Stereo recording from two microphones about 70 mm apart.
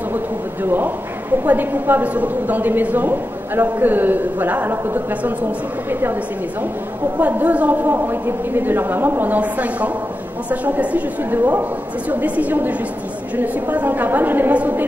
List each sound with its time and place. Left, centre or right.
0.7 s a woman's voice: right
7.2 s a woman's voice: right